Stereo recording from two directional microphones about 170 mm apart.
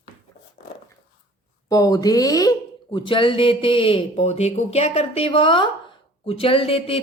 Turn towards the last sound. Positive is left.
turn(degrees=35)  # may be behind; listen again after turning